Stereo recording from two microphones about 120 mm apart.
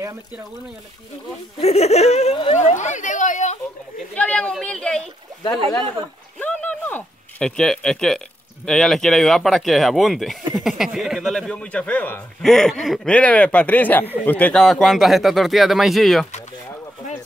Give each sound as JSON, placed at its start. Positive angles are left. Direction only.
{"t": 1.6, "sound": "speech", "side_deg": 60}
{"t": 2.5, "sound": "speech", "side_deg": 80}
{"t": 4.1, "sound": "speech", "side_deg": 10}
{"t": 6.4, "sound": "a sound", "side_deg": 10}
{"t": 8.6, "sound": "speech", "side_deg": 5}
{"t": 14.6, "sound": "speech", "side_deg": 0}